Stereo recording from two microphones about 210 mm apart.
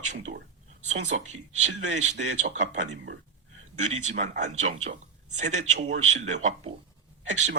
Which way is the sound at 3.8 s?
35° right (ahead or behind).